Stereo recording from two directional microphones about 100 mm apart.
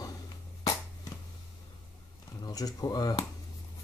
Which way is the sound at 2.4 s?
40° left (ahead or behind).